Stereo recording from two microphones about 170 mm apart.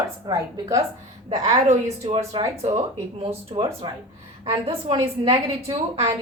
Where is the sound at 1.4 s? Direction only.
40° right (ahead or behind); by 5.7 s 20° right (ahead or behind).